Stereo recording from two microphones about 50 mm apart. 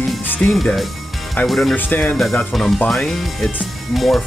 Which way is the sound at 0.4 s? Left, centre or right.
Left.